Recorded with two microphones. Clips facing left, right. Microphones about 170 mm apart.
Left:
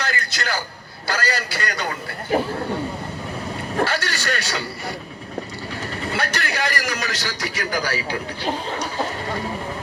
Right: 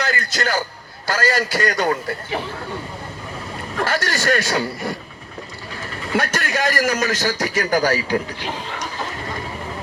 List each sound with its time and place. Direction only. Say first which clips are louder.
0.0 s a sound: right 4 dB; 45° right (ahead or behind)
1.0 s a man's voice: right 5 dB; 45° right (ahead or behind)
3.8 s a man's voice: right 4 dB; 45° right (ahead or behind)
6.1 s a man's voice: right 6 dB; 45° right (ahead or behind)